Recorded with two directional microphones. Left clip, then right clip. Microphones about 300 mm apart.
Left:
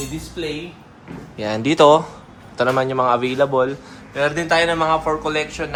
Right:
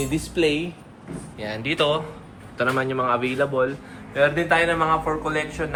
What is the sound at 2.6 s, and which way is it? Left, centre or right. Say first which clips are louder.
A man's voice: left 5 dB; centre.